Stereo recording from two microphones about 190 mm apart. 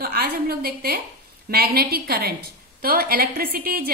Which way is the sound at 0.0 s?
55° right (ahead or behind).